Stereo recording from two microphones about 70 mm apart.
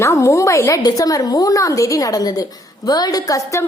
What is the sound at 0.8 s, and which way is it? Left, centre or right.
A woman's voice, left.